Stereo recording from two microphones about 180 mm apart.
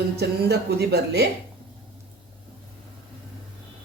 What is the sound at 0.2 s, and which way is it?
Speech, 65° right (ahead or behind).